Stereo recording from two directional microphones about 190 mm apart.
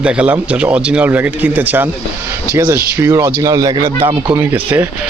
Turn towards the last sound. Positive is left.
turn(degrees=-10)  # may be behind; listen again after turning